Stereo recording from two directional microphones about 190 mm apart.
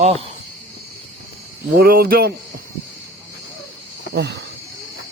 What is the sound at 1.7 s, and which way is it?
Speech, 50° right (ahead or behind).